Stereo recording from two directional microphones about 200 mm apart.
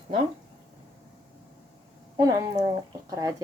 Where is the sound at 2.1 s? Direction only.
20° right (ahead or behind).